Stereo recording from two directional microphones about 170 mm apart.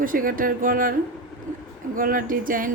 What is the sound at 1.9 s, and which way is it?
Speech, 55° right (ahead or behind).